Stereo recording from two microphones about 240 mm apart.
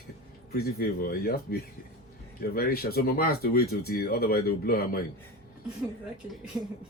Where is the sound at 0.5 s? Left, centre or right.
Left.